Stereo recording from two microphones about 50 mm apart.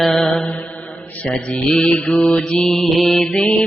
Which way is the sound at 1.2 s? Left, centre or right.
Left.